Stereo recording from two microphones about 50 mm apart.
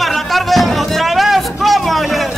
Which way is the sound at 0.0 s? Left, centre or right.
Centre.